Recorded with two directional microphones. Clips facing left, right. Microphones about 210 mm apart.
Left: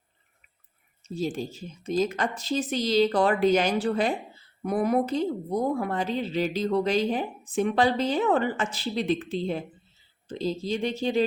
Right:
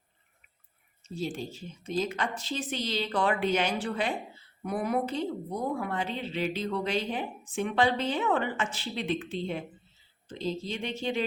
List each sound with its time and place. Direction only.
1.1 s a woman's voice: 40° left (ahead or behind)